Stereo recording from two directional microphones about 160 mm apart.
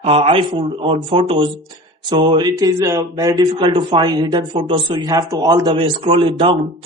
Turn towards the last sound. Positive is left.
turn(degrees=-30)  # may be behind; listen again after turning